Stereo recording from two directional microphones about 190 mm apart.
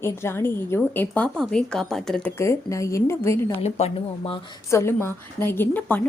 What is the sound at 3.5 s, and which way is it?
Speech, 35° left (ahead or behind).